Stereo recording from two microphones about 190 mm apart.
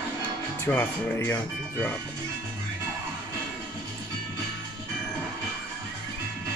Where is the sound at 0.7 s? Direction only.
10° left (ahead or behind).